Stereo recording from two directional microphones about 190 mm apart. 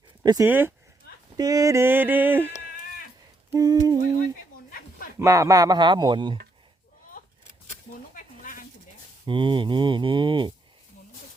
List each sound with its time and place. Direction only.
0.2 s yodeling: 20° right (ahead or behind)
3.5 s mantra: 20° right (ahead or behind)
5.2 s mantra: 15° right (ahead or behind)
8.1 s a sound: 45° left (ahead or behind)
9.2 s mantra: 25° right (ahead or behind)